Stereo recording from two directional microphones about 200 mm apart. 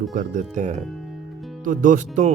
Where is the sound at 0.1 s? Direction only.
40° right (ahead or behind).